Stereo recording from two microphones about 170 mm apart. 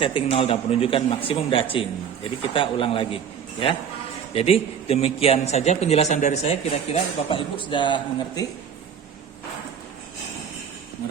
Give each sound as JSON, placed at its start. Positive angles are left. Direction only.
{"t": 0.0, "sound": "a man's voice", "side_deg": 30}
{"t": 7.3, "sound": "a man's voice", "side_deg": 30}